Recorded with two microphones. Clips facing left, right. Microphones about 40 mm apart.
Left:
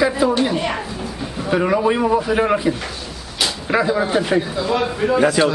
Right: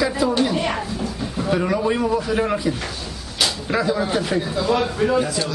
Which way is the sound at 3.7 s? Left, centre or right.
Centre.